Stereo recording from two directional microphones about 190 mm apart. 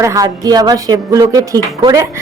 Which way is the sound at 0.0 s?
15° right (ahead or behind).